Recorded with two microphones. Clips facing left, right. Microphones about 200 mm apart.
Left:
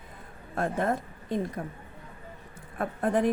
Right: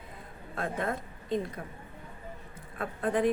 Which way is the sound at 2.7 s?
50° left (ahead or behind).